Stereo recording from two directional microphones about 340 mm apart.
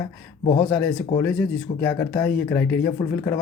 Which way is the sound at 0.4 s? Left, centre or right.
Centre.